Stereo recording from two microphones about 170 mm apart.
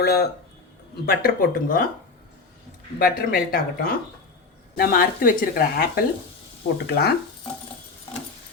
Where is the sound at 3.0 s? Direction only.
60° left (ahead or behind).